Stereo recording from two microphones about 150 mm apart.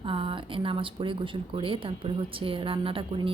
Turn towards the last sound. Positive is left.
turn(degrees=-35)  # may be behind; listen again after turning